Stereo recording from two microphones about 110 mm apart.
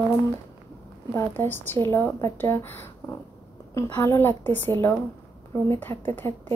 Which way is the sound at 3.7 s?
20° left (ahead or behind).